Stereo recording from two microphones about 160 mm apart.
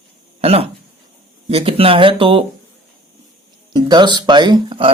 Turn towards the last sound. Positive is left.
turn(degrees=-30)  # may be behind; listen again after turning